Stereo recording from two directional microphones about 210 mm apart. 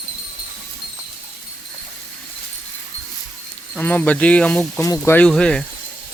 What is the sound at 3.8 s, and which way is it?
Speech, 10° left (ahead or behind).